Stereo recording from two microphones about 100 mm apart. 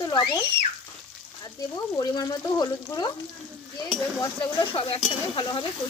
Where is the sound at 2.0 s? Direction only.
40° left (ahead or behind).